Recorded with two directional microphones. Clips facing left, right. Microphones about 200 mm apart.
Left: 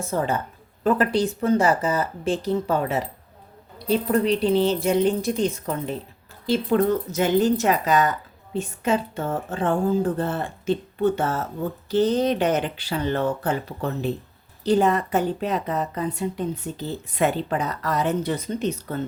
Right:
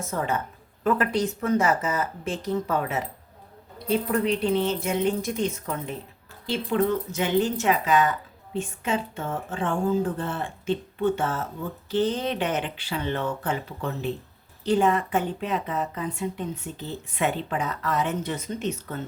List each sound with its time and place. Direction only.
0.0 s a woman's voice: 30° left (ahead or behind)